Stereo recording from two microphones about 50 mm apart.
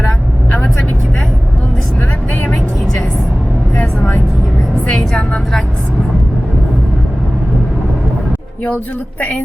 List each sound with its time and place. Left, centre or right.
3.8 s vehicle: left
4.9 s vehicle: centre